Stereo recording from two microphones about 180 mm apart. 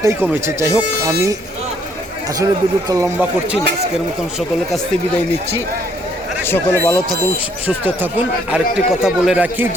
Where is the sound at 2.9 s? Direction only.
15° right (ahead or behind).